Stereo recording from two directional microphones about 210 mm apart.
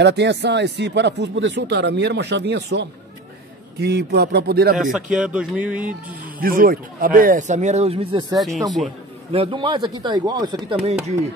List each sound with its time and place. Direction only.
0.0 s speech: 55° right (ahead or behind)
5.1 s speech: 5° right (ahead or behind)
6.4 s speech: 45° right (ahead or behind); by 8.4 s 25° right (ahead or behind)
8.4 s speech: centre (ahead or behind)
9.3 s speech: 25° right (ahead or behind)